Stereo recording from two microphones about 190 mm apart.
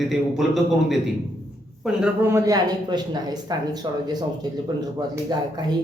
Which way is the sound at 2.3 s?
20° right (ahead or behind).